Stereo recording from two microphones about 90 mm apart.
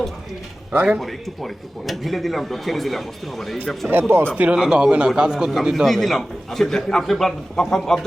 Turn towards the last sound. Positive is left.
turn(degrees=5)  # may be behind; listen again after turning